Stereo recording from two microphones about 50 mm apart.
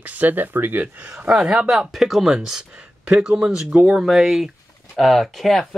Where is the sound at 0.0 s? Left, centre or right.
Right.